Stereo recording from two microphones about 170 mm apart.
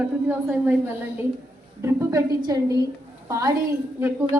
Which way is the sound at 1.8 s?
15° right (ahead or behind).